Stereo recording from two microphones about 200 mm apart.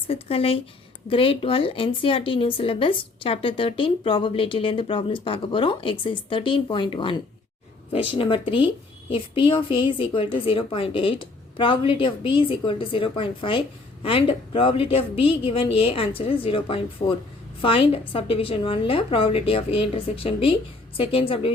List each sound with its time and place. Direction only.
0.1 s a woman's voice: 30° left (ahead or behind)